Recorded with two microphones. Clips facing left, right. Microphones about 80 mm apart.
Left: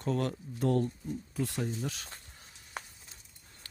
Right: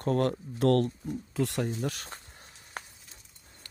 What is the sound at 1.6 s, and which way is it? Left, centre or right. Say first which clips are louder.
Speech: right 4 dB; right.